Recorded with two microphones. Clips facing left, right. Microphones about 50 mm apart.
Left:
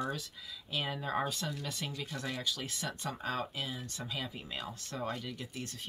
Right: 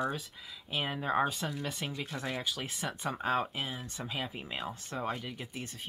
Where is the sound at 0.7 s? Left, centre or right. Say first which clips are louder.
Right 3 dB; right.